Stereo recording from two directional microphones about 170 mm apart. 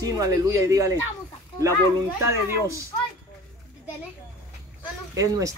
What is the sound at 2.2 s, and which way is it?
Speech, 15° right (ahead or behind).